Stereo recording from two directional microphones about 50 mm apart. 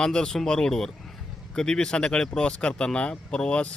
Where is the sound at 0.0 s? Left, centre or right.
Centre.